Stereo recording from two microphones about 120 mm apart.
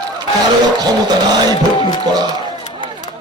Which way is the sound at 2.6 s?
40° left (ahead or behind).